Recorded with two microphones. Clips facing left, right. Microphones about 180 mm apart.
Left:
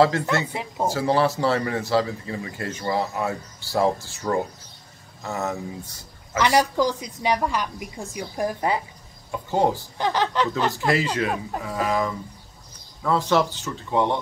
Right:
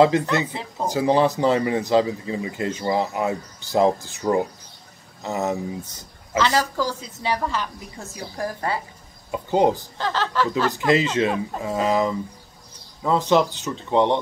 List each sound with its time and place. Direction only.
0.0 s speech: 15° right (ahead or behind)
0.5 s a woman's voice: 15° left (ahead or behind)
0.8 s speech: 15° right (ahead or behind)
6.3 s a woman's voice: 15° left (ahead or behind)
9.3 s speech: 20° right (ahead or behind)
9.9 s a woman's voice: 15° left (ahead or behind)
10.9 s speech: 20° right (ahead or behind)